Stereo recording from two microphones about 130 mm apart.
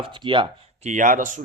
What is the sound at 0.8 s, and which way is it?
Speech, 75° right (ahead or behind).